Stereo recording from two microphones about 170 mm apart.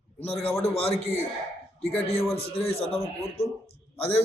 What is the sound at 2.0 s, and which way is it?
A man's voice, 35° left (ahead or behind).